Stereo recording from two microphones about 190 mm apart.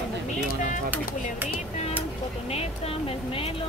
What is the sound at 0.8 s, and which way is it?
Speech, 10° right (ahead or behind).